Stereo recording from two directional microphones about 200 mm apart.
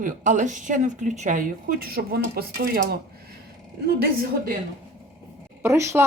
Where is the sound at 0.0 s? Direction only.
40° right (ahead or behind).